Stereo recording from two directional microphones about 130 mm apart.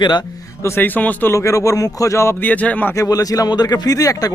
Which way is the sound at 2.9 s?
25° left (ahead or behind).